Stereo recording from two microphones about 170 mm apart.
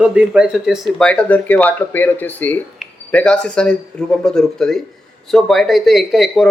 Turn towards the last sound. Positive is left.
turn(degrees=0)  # may be behind; listen again after turning